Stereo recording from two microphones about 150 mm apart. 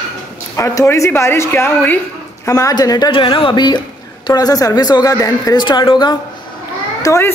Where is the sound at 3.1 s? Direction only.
35° left (ahead or behind).